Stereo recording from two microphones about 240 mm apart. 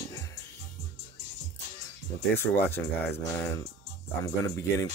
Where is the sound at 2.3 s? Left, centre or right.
Centre.